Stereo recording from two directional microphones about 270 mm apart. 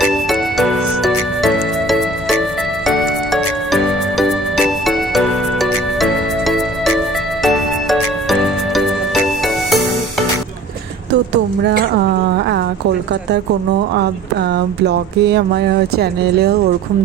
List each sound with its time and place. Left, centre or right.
0.0 s music: centre
11.6 s a sound: right
14.5 s speech: right